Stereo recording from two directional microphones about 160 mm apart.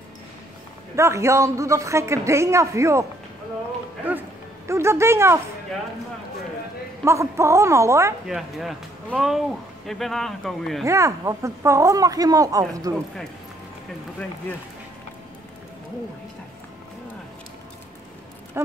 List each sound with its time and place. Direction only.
0.9 s a man's voice: 15° right (ahead or behind)
7.1 s a man's voice: 20° right (ahead or behind)
8.3 s speech: centre (ahead or behind)
10.9 s speech: 20° right (ahead or behind)